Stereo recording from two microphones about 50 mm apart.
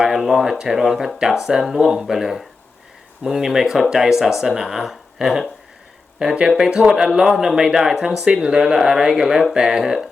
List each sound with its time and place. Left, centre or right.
0.0 s speech: centre